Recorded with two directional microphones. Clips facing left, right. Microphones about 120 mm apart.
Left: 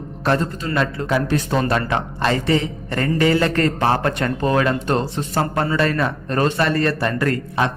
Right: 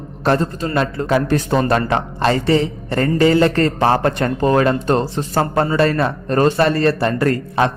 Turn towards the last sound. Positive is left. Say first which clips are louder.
# right 4 dB
turn(degrees=-35)  # may be behind; listen again after turning